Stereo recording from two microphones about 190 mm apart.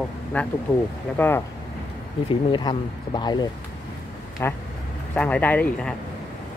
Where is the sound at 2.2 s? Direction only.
25° left (ahead or behind).